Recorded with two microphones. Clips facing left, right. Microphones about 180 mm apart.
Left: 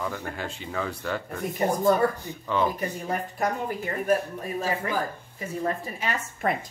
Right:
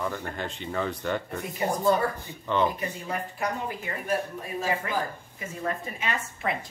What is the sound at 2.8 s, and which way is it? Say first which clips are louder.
Speech: left 3 dB; 45° left (ahead or behind).